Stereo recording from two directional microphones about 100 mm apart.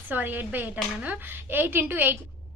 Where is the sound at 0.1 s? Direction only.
20° right (ahead or behind).